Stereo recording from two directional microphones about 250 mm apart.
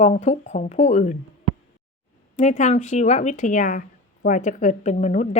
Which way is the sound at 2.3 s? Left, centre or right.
Left.